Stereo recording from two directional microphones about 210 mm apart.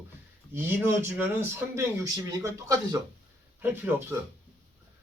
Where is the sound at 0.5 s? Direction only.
10° right (ahead or behind).